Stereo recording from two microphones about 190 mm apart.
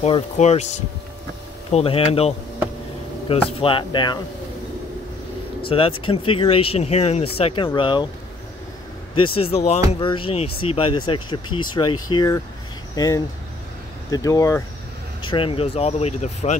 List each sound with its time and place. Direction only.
0.0 s speech: 35° left (ahead or behind)
5.6 s speech: 25° left (ahead or behind)
9.1 s speech: 25° left (ahead or behind)